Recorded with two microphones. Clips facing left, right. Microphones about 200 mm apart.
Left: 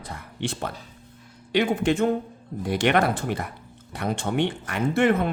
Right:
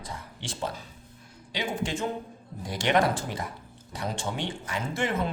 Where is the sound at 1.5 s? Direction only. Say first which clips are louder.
Left 9 dB; 60° left (ahead or behind).